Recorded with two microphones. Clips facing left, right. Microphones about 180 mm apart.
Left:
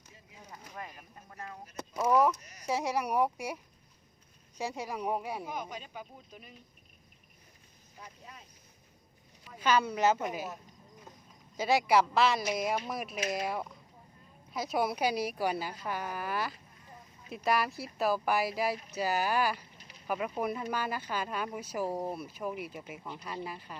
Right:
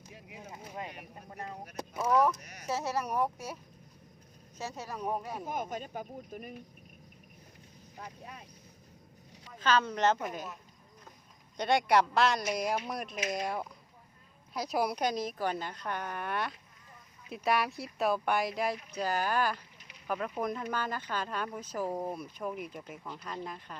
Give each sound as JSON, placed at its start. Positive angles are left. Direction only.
{"t": 0.1, "sound": "a sound", "side_deg": -70}
{"t": 0.9, "sound": "speech", "side_deg": -70}
{"t": 2.0, "sound": "speech", "side_deg": 10}
{"t": 2.4, "sound": "speech", "side_deg": -65}
{"t": 2.6, "sound": "speech", "side_deg": 15}
{"t": 5.5, "sound": "speech", "side_deg": -50}
{"t": 7.9, "sound": "speech", "side_deg": -60}
{"t": 9.6, "sound": "speech", "side_deg": 10}
{"t": 11.5, "sound": "speech", "side_deg": 5}